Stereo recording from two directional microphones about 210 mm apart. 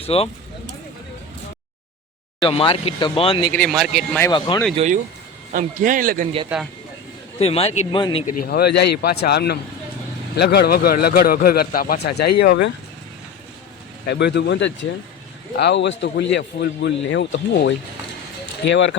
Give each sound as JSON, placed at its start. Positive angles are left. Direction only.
{"t": 0.0, "sound": "speech", "side_deg": 30}
{"t": 2.4, "sound": "speech", "side_deg": 25}
{"t": 3.5, "sound": "a man's voice", "side_deg": 0}
{"t": 4.2, "sound": "speech", "side_deg": 20}
{"t": 4.7, "sound": "speech", "side_deg": -30}
{"t": 7.3, "sound": "speech", "side_deg": 30}
{"t": 8.4, "sound": "a man's voice", "side_deg": 50}
{"t": 14.1, "sound": "a man's voice", "side_deg": 55}